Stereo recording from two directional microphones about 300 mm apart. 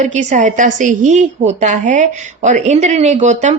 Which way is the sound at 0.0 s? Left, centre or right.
Right.